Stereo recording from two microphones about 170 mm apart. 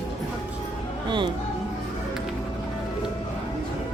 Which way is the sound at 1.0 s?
25° right (ahead or behind).